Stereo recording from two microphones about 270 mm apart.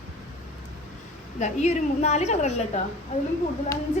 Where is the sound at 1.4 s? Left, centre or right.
Left.